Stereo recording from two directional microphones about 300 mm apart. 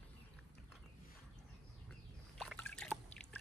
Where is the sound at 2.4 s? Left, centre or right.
Centre.